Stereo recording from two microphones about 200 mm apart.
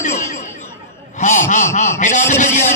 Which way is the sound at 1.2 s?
40° left (ahead or behind).